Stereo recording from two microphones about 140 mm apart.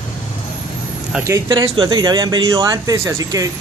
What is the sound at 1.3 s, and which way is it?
Speech, 30° right (ahead or behind).